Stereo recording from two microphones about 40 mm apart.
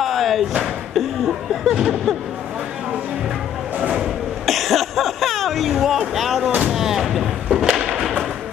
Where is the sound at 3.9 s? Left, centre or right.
Centre.